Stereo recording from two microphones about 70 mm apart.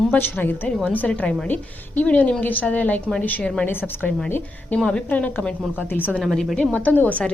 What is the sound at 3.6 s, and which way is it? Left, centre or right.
Speech, left.